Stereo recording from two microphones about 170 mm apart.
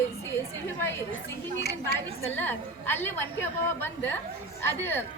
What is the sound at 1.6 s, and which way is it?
Speech, 70° left (ahead or behind).